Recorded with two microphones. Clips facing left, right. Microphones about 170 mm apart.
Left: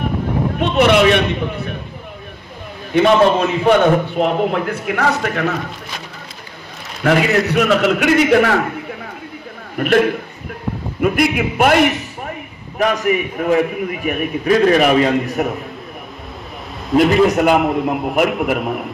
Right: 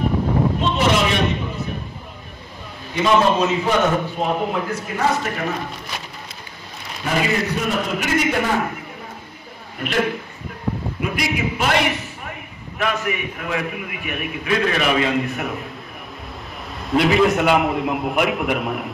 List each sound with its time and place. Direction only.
0.6 s a man's voice: 65° left (ahead or behind)
2.9 s a man's voice: 60° left (ahead or behind)
7.0 s a man's voice: 80° left
9.8 s a man's voice: 55° left (ahead or behind)
11.0 s a man's voice: 55° left (ahead or behind)
12.7 s a man's voice: 40° left (ahead or behind)
16.9 s a man's voice: centre (ahead or behind)